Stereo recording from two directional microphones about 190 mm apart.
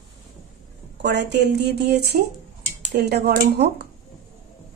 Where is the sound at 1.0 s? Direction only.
60° right (ahead or behind).